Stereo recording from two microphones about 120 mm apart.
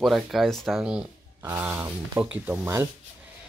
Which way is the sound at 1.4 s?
20° right (ahead or behind).